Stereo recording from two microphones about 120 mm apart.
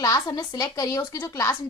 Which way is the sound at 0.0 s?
35° left (ahead or behind).